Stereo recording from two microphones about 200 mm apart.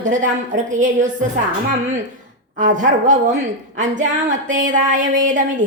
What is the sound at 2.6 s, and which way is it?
Speech, 40° right (ahead or behind).